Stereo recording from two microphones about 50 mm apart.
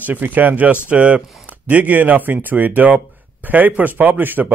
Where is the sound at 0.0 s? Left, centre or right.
Right.